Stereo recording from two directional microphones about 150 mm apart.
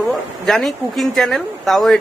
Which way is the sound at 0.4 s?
Centre (ahead or behind).